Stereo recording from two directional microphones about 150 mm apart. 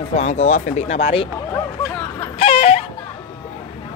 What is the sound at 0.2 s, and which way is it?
Speech, 50° left (ahead or behind).